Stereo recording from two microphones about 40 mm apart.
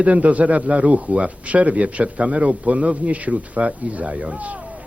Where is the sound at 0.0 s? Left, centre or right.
Right.